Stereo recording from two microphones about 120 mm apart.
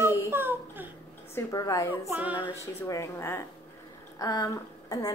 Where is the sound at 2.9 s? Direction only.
25° left (ahead or behind).